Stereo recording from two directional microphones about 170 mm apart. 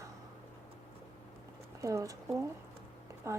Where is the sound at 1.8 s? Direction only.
15° right (ahead or behind).